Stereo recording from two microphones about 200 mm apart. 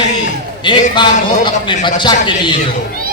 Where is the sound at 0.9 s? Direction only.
25° left (ahead or behind).